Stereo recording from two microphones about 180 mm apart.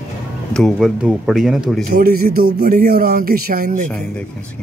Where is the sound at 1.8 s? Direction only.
55° right (ahead or behind).